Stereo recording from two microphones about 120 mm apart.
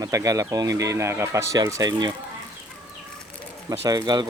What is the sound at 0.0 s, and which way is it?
Speech, 30° right (ahead or behind).